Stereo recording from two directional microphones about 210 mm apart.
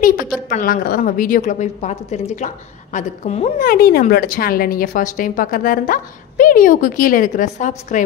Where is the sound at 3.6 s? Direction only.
45° left (ahead or behind).